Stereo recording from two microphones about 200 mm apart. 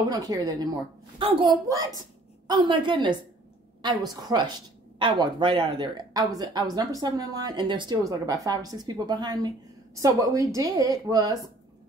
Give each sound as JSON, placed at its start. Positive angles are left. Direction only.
{"t": 0.1, "sound": "a woman's voice", "side_deg": -20}